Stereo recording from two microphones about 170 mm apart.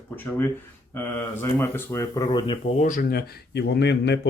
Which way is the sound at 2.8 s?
50° left (ahead or behind).